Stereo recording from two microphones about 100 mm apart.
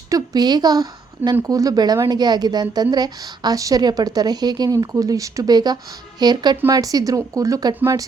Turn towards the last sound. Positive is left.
turn(degrees=-40)  # may be behind; listen again after turning